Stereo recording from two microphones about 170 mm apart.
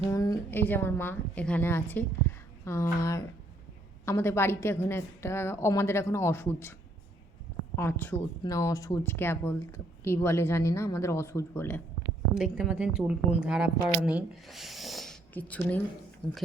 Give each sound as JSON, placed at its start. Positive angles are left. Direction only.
{"t": 0.1, "sound": "a sound", "side_deg": 20}
{"t": 0.6, "sound": "speech", "side_deg": 10}
{"t": 7.8, "sound": "speech", "side_deg": 15}
{"t": 12.3, "sound": "speech", "side_deg": -5}